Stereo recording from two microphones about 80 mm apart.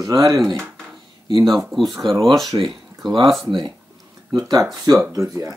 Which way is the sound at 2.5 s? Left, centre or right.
Right.